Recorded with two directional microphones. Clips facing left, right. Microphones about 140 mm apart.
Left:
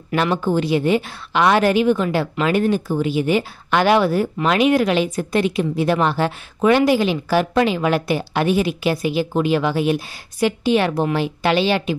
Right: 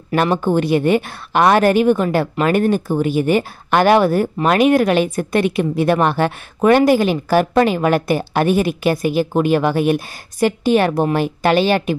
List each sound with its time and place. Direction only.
0.1 s a woman's voice: 50° right (ahead or behind)